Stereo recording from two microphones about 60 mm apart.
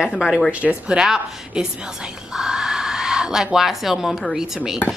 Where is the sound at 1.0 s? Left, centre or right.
Centre.